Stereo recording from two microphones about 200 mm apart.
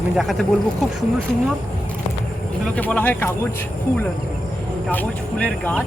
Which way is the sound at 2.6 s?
5° left (ahead or behind).